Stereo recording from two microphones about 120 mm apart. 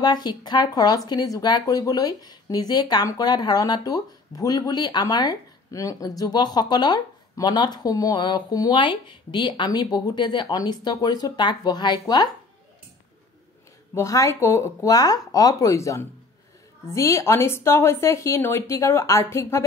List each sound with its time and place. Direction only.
0.0 s speech: 35° left (ahead or behind)
13.9 s a woman's voice: 25° left (ahead or behind)